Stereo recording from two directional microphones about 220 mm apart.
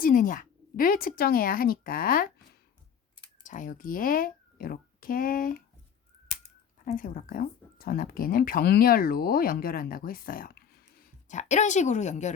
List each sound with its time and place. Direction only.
0.0 s speech: 40° left (ahead or behind)
3.4 s a child's voice: 35° left (ahead or behind)
6.8 s speech: 40° left (ahead or behind)